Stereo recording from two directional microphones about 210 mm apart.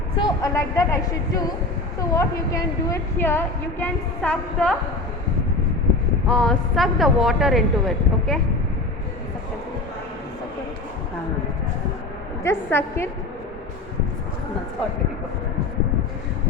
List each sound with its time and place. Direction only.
0.2 s a woman's voice: 15° left (ahead or behind)
2.0 s a woman's voice: 15° left (ahead or behind)
6.2 s speech: 5° left (ahead or behind)
12.4 s a woman's voice: 10° left (ahead or behind)